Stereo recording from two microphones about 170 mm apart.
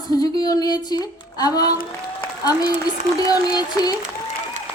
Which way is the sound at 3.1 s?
20° left (ahead or behind).